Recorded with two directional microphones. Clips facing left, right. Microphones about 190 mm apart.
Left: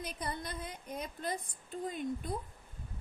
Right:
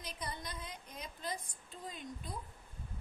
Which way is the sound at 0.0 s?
55° left (ahead or behind).